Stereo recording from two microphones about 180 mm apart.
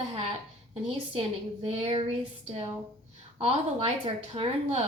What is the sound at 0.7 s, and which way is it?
A woman's voice, 35° right (ahead or behind).